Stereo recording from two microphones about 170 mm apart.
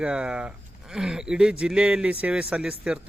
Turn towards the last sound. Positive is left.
turn(degrees=-5)  # may be behind; listen again after turning